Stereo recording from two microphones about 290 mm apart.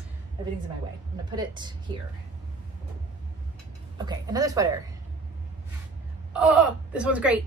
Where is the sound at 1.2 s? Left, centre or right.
Centre.